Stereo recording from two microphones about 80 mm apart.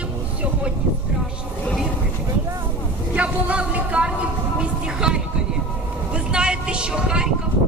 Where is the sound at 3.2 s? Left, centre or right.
Centre.